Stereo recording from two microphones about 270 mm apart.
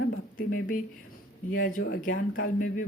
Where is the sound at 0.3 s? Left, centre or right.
Left.